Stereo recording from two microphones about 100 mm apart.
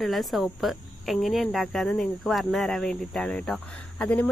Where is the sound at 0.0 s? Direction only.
Centre (ahead or behind).